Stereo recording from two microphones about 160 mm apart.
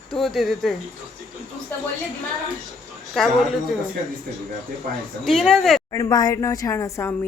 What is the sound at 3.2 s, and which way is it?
Speech, centre (ahead or behind).